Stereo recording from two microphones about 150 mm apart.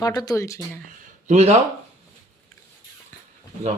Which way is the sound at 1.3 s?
50° right (ahead or behind).